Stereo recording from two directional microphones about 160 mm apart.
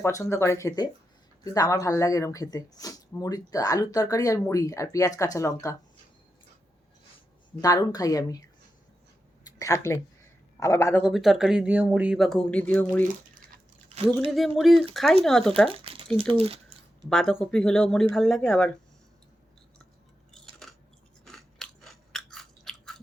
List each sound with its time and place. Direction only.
0.0 s speech: 15° left (ahead or behind)
7.6 s speech: 20° left (ahead or behind)
9.5 s speech: 20° left (ahead or behind)
11.0 s speech: centre (ahead or behind)
13.9 s speech: 35° right (ahead or behind)
14.3 s speech: centre (ahead or behind)
15.8 s a sound: 35° right (ahead or behind)
16.1 s speech: 35° right (ahead or behind)
17.1 s speech: 5° left (ahead or behind)
20.3 s a sound: centre (ahead or behind)
21.2 s chewing: centre (ahead or behind)